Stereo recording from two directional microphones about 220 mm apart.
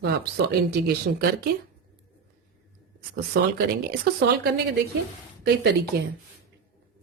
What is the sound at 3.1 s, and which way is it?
Speech, 45° right (ahead or behind).